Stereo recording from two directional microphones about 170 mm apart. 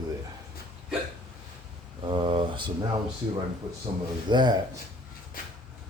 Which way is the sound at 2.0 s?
30° right (ahead or behind).